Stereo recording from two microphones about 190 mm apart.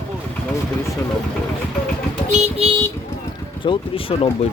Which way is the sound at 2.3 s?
35° right (ahead or behind).